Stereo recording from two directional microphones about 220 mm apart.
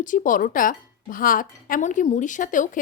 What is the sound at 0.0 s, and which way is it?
Speech, 35° left (ahead or behind).